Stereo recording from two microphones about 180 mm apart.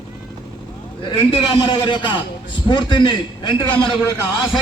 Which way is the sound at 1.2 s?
25° left (ahead or behind).